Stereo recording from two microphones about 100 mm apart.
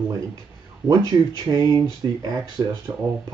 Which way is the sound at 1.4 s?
40° right (ahead or behind).